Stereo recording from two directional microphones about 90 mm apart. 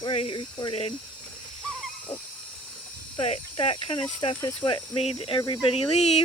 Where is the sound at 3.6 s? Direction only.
85° left.